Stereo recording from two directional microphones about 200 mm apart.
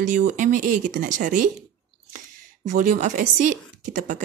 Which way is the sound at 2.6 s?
40° right (ahead or behind).